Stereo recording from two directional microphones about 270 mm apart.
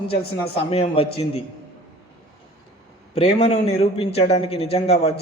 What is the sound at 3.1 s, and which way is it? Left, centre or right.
A man's voice, left.